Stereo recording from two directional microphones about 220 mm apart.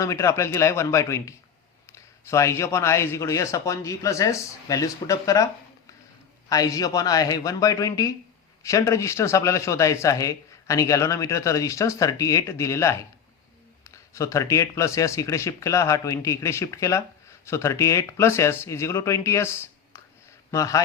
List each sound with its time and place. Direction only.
0.0 s speech: 15° left (ahead or behind)
6.5 s speech: 15° left (ahead or behind)